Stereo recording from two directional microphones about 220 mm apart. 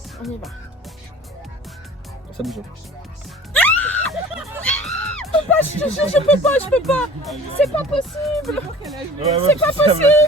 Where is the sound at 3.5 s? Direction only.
5° left (ahead or behind).